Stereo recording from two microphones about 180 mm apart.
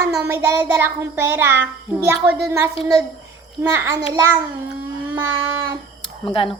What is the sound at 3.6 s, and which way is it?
Child singing, 15° right (ahead or behind).